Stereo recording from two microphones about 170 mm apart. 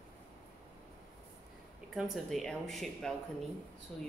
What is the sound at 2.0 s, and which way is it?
Speech, centre (ahead or behind).